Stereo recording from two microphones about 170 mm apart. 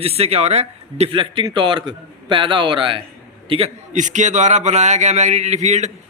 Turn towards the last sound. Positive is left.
turn(degrees=-40)  # may be behind; listen again after turning